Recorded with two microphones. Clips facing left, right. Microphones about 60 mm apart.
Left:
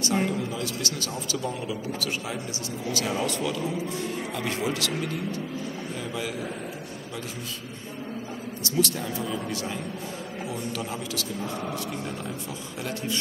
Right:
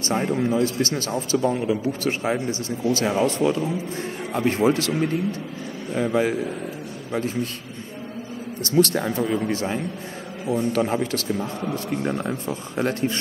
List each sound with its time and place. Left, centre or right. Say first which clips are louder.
0.0 s a man's voice: right 4 dB; right
8.6 s a man's voice: right 8 dB; right
9.5 s a man's voice: right 7 dB; right
10.7 s a man's voice: right 10 dB; right